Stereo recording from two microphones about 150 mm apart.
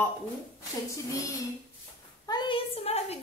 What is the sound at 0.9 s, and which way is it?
Speech, 20° left (ahead or behind).